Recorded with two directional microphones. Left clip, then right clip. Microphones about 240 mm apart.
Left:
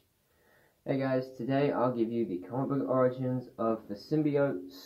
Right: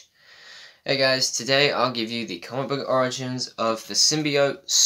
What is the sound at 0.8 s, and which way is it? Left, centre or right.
Speech, right.